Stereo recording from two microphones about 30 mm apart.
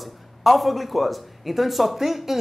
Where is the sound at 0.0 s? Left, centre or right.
Centre.